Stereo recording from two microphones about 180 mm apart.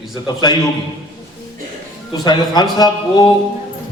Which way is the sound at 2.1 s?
20° left (ahead or behind).